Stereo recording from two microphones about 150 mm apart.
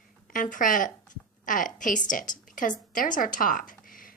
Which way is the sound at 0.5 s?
60° left (ahead or behind).